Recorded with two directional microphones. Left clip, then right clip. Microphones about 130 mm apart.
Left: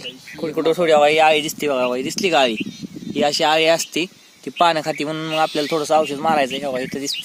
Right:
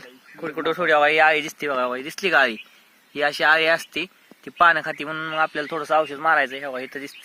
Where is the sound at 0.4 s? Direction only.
25° left (ahead or behind).